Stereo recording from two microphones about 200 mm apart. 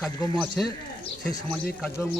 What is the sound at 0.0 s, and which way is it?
Speech, 5° left (ahead or behind).